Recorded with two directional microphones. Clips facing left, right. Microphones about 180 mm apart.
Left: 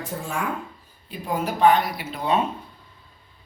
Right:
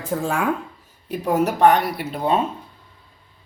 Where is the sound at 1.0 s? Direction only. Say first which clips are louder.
Right 7 dB; 75° right (ahead or behind); by 2.4 s 50° right (ahead or behind).